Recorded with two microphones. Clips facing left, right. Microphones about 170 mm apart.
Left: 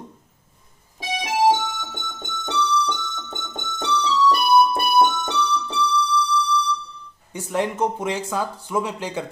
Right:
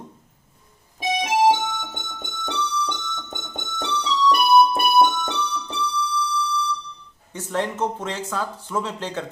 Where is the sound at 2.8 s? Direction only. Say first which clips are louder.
Left 2 dB; 20° right (ahead or behind).